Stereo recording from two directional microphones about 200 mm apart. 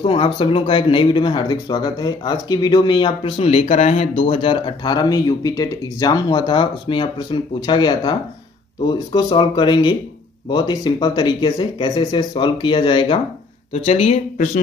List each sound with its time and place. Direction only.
0.0 s speech: 25° left (ahead or behind)